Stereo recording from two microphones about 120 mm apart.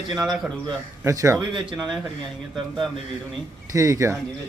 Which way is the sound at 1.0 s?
25° right (ahead or behind).